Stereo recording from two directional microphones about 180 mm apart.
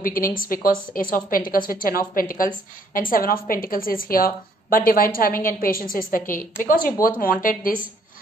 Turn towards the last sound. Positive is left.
turn(degrees=50)  # may be behind; listen again after turning